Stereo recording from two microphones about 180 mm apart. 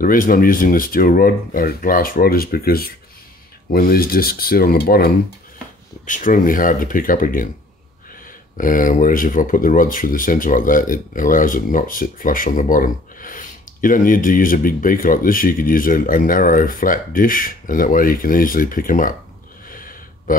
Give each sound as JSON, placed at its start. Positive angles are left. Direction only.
{"t": 0.0, "sound": "speech", "side_deg": 50}
{"t": 6.0, "sound": "speech", "side_deg": 45}
{"t": 8.5, "sound": "speech", "side_deg": 50}
{"t": 19.7, "sound": "a sound", "side_deg": 50}